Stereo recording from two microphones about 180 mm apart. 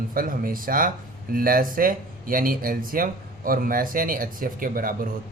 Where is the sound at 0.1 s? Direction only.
50° right (ahead or behind).